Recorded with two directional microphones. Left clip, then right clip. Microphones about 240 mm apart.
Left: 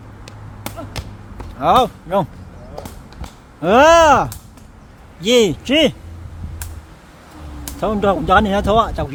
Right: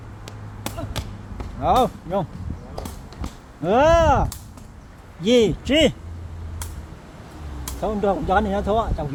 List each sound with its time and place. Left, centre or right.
0.3 s a sound: centre
1.6 s speech: left
3.6 s speech: left
7.6 s speech: left